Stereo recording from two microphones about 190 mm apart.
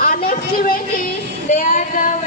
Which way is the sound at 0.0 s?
50° left (ahead or behind).